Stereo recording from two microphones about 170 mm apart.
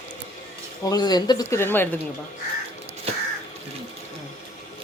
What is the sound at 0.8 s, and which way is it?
Speech, 20° left (ahead or behind).